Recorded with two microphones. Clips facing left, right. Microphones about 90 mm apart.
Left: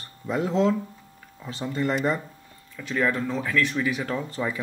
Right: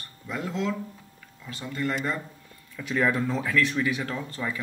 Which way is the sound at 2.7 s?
5° right (ahead or behind).